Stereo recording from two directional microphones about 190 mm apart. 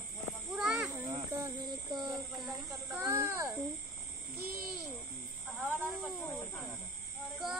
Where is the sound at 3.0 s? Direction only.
15° right (ahead or behind).